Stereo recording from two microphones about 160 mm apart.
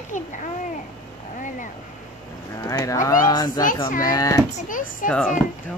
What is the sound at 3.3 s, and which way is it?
Speech, 25° left (ahead or behind).